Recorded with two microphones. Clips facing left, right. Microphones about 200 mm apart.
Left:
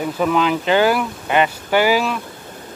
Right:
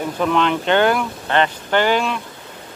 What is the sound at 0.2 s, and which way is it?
Speech, 5° left (ahead or behind).